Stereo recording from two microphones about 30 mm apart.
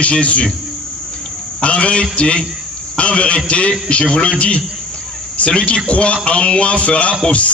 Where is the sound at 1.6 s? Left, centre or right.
Left.